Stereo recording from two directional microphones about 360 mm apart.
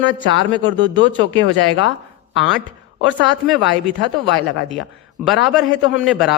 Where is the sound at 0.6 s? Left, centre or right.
Centre.